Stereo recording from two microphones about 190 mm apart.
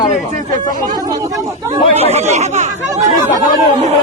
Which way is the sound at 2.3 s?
35° right (ahead or behind).